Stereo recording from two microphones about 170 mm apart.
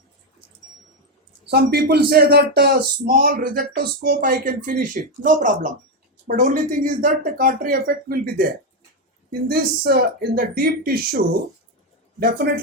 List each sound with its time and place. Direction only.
1.5 s speech: 70° right (ahead or behind)
3.1 s speech: 55° right (ahead or behind)